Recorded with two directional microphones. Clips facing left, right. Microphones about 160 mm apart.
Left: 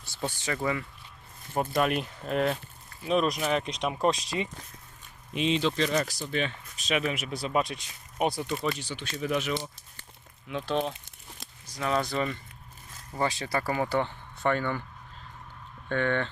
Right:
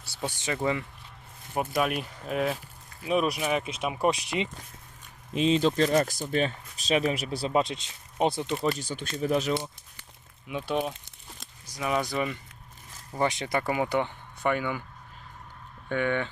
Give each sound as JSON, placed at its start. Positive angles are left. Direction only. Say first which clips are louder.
{"t": 0.0, "sound": "speech", "louder": "even", "side_deg": -10}
{"t": 1.5, "sound": "speech", "louder": "left 1 dB", "side_deg": -5}
{"t": 5.3, "sound": "speech", "louder": "right 3 dB", "side_deg": -35}
{"t": 8.6, "sound": "speech", "louder": "right 3 dB", "side_deg": -45}
{"t": 10.5, "sound": "speech", "louder": "even", "side_deg": -10}
{"t": 15.9, "sound": "speech", "louder": "even", "side_deg": -10}